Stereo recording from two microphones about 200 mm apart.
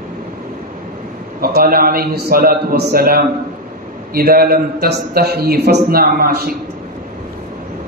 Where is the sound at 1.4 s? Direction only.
45° right (ahead or behind).